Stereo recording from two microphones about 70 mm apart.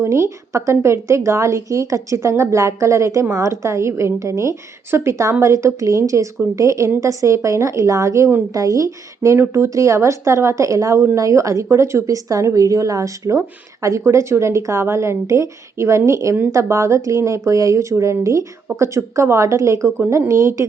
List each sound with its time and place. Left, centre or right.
0.0 s speech: right